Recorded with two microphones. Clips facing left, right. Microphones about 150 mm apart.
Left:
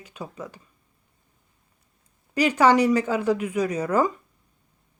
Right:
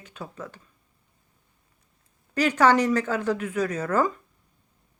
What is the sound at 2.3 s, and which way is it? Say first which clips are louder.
Speech: left 2 dB; 10° left (ahead or behind).